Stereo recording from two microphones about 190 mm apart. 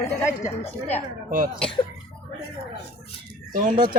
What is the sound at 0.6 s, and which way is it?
Speech, 10° left (ahead or behind).